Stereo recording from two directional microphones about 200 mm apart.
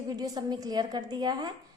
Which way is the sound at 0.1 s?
20° right (ahead or behind).